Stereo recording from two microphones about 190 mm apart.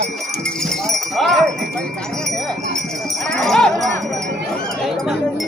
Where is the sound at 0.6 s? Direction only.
Centre (ahead or behind).